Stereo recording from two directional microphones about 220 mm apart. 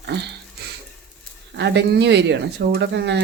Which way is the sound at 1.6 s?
50° right (ahead or behind).